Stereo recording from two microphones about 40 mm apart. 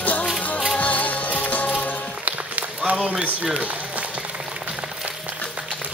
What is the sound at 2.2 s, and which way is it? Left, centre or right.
Run, right.